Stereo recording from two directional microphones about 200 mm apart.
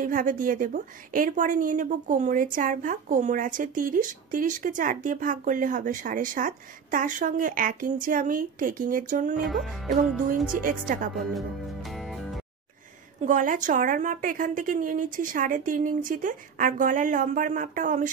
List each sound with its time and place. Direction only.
0.0 s a woman's voice: 45° right (ahead or behind)
9.4 s music: centre (ahead or behind)
10.5 s a woman's voice: 40° right (ahead or behind)
11.1 s music: centre (ahead or behind)
13.2 s a woman's voice: 40° right (ahead or behind)